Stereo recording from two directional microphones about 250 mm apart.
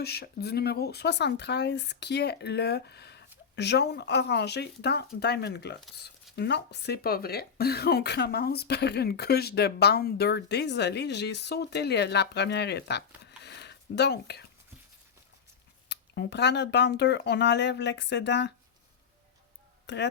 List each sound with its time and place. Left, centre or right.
0.0 s speech: left
15.9 s speech: left
19.9 s speech: left